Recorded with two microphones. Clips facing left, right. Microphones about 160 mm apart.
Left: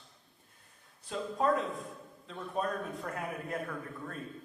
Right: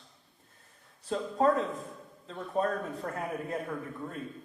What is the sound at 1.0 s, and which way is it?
Speech, 40° right (ahead or behind).